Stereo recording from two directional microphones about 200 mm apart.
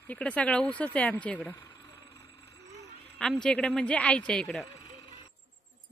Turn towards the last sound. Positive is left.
turn(degrees=25)  # may be behind; listen again after turning